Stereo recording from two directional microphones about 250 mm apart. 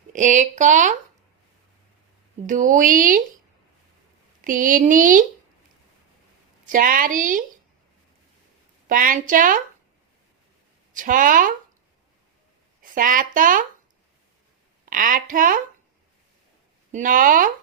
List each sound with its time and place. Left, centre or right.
0.1 s speech: right
2.5 s speech: right
4.4 s speech: right
6.7 s speech: right
8.9 s speech: right
10.9 s speech: right
12.8 s speech: right
14.8 s speech: right
16.9 s speech: right